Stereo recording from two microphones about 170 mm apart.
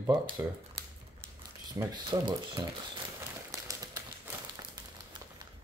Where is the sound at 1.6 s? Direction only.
25° right (ahead or behind).